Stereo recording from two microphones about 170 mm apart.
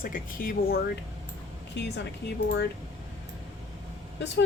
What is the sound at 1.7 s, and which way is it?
Speech, 90° left.